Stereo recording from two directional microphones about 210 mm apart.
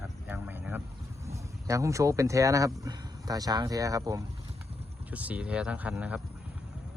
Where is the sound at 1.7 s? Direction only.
15° right (ahead or behind).